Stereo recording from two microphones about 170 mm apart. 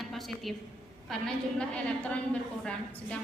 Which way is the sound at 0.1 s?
Centre (ahead or behind).